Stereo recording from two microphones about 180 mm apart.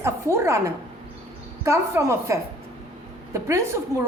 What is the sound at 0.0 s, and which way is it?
A woman's voice, 15° right (ahead or behind).